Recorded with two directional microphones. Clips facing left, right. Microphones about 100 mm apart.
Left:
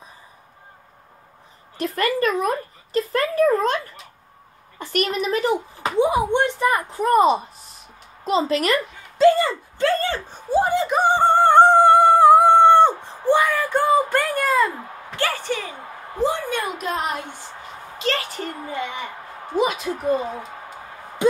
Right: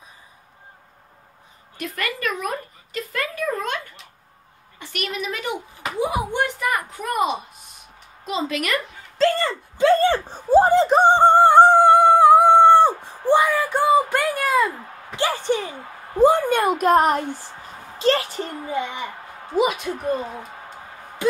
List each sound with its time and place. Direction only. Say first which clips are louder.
1.8 s speech: left 7 dB; 35° left (ahead or behind)
9.2 s a sound: left 4 dB; 5° left (ahead or behind)
9.9 s speech: right 6 dB; 30° right (ahead or behind)
11.5 s dog: even; centre (ahead or behind)
13.3 s a sound: right 1 dB; 15° right (ahead or behind)
15.1 s a woman's voice: right 3 dB; 20° right (ahead or behind)
16.2 s a woman's voice: right 7 dB; 50° right (ahead or behind)
17.9 s a woman's voice: right 5 dB; 30° right (ahead or behind)
19.5 s a woman's voice: right 1 dB; centre (ahead or behind)